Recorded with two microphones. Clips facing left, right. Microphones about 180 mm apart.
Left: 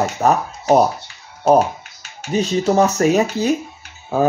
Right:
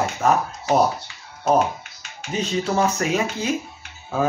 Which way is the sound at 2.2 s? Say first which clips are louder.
Left 5 dB; 40° left (ahead or behind).